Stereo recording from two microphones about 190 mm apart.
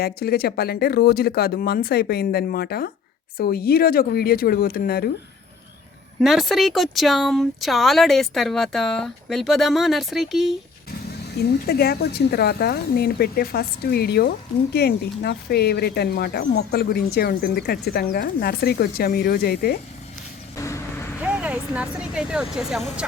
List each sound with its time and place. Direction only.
0.0 s speech: 55° left (ahead or behind)
6.2 s speech: centre (ahead or behind)
11.3 s speech: 55° left (ahead or behind)
20.6 s speech: 15° left (ahead or behind)
21.2 s speech: 5° right (ahead or behind)